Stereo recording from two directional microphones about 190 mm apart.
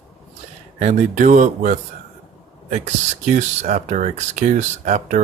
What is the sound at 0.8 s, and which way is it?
Speech, 40° right (ahead or behind).